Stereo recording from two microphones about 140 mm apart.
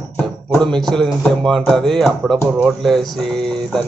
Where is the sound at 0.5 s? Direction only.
5° left (ahead or behind).